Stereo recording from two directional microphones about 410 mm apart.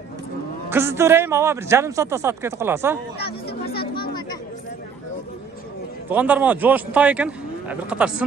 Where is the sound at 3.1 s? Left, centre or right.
Left.